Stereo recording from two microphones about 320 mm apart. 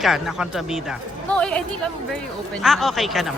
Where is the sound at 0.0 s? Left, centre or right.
Centre.